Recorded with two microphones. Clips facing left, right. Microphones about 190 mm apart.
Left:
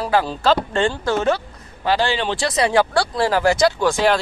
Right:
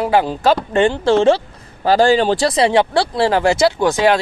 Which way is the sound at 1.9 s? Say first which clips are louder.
Right 7 dB; 40° right (ahead or behind).